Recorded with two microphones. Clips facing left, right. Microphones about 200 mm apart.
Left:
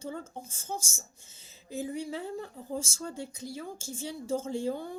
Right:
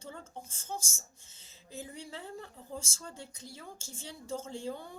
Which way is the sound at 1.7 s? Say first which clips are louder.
Left 9 dB; 10° left (ahead or behind).